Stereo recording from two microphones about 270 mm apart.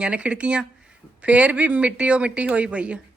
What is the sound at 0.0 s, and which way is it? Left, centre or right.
Speech, centre.